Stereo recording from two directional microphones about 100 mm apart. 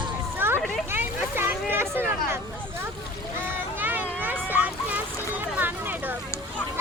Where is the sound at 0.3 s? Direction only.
20° right (ahead or behind).